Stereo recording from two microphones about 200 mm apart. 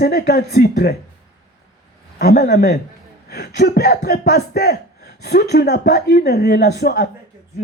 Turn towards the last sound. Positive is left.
turn(degrees=55)  # may be behind; listen again after turning